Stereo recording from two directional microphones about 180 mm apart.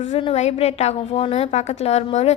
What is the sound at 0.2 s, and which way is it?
A woman's voice, 35° left (ahead or behind).